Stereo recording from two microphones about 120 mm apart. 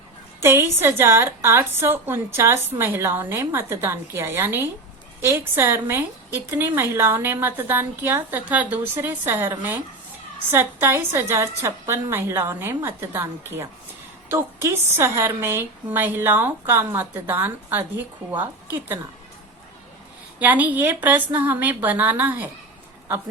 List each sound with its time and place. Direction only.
0.3 s a woman's voice: 20° right (ahead or behind)
20.4 s a woman's voice: 15° right (ahead or behind)